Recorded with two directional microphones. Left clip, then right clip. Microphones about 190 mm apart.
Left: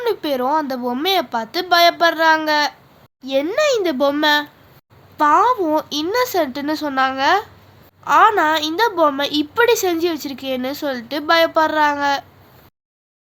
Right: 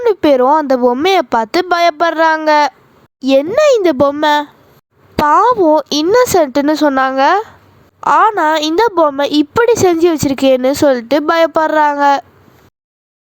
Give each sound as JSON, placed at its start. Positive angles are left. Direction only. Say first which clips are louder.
{"t": 0.0, "sound": "a woman's voice", "louder": "right 10 dB", "side_deg": -45}